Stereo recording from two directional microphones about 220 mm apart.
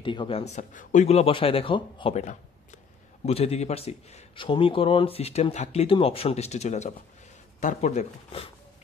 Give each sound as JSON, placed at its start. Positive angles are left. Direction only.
{"t": 0.0, "sound": "a man's voice", "side_deg": 20}